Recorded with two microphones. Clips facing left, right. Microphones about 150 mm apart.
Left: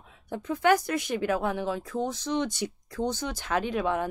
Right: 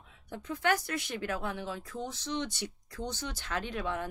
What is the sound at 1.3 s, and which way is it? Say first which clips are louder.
Speech: left 8 dB; 85° left.